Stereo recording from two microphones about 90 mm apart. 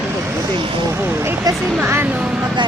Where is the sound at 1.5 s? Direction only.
45° right (ahead or behind).